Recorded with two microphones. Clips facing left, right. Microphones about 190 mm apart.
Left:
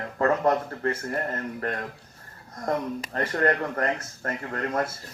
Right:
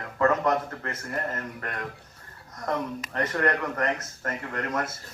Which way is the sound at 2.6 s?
35° left (ahead or behind).